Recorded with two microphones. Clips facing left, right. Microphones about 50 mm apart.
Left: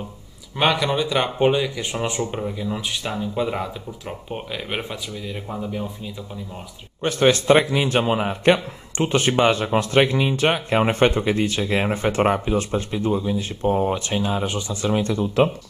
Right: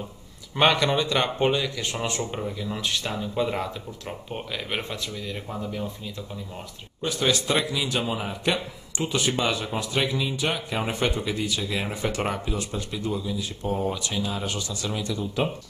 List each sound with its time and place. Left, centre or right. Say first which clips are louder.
0.6 s speech: left 1 dB; centre
7.0 s a man's voice: left 7 dB; left